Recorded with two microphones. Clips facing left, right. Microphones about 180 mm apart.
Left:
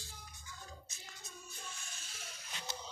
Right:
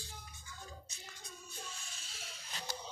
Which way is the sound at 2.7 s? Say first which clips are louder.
Right 1 dB; 20° left (ahead or behind).